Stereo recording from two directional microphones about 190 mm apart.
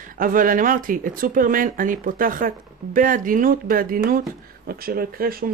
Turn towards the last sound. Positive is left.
turn(degrees=-50)  # may be behind; listen again after turning